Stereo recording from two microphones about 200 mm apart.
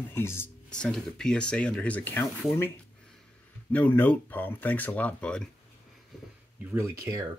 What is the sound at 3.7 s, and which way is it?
Speech, 10° left (ahead or behind).